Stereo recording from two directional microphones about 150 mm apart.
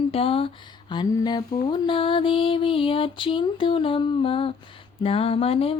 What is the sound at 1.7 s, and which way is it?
Mantra, 35° left (ahead or behind).